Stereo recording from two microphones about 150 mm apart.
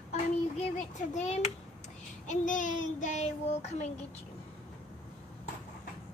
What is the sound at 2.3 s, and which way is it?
Child singing, 60° left (ahead or behind).